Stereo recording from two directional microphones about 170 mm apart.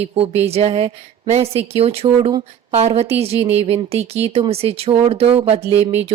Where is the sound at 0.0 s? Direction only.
35° right (ahead or behind).